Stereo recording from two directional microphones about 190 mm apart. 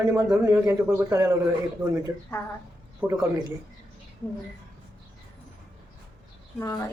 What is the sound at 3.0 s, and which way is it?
Speech, 15° right (ahead or behind).